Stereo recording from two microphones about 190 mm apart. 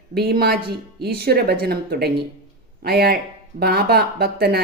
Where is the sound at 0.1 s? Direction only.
55° right (ahead or behind).